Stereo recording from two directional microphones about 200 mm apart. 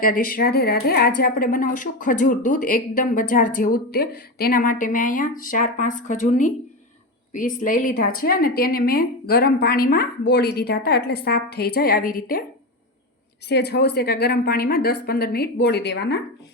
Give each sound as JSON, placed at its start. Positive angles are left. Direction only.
{"t": 0.0, "sound": "a woman's voice", "side_deg": 45}
{"t": 13.5, "sound": "a woman's voice", "side_deg": 55}